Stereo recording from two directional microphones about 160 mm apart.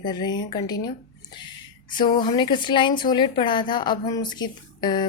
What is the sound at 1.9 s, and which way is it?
A woman's voice, 30° left (ahead or behind).